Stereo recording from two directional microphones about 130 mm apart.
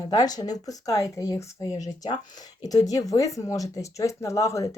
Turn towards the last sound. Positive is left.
turn(degrees=25)  # may be behind; listen again after turning